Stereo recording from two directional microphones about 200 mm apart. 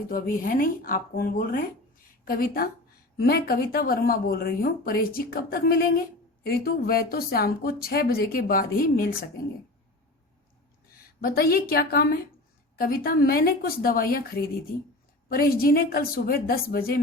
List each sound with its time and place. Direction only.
0.1 s speech: 45° left (ahead or behind)
11.2 s speech: 50° left (ahead or behind)